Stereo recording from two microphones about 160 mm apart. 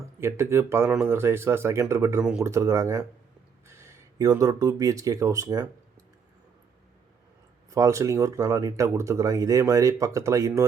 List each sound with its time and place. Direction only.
0.2 s speech: 15° right (ahead or behind)
7.7 s speech: 20° right (ahead or behind)